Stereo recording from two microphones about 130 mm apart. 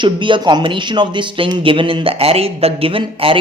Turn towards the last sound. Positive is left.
turn(degrees=-45)  # may be behind; listen again after turning